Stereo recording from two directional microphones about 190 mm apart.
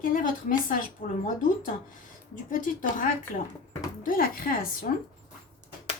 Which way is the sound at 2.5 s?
45° left (ahead or behind).